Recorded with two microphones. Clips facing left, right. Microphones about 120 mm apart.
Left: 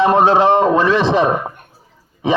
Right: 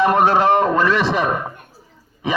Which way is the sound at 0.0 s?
25° left (ahead or behind).